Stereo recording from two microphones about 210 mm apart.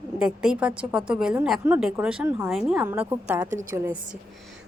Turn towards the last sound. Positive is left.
turn(degrees=-10)  # may be behind; listen again after turning